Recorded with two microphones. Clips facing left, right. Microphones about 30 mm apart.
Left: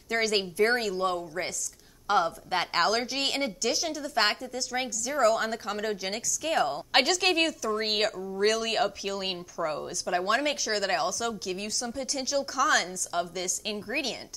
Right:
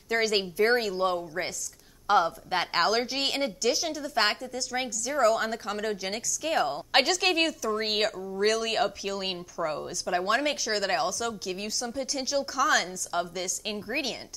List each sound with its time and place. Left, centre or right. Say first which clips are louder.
0.1 s a woman's voice: right 1 dB; centre